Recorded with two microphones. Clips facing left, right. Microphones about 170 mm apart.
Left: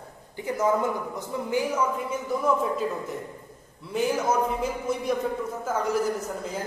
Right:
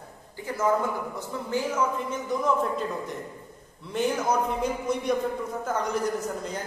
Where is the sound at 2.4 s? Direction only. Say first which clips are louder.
Left 1 dB; 5° left (ahead or behind).